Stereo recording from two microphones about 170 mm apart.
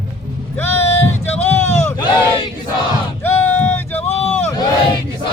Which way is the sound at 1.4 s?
15° left (ahead or behind).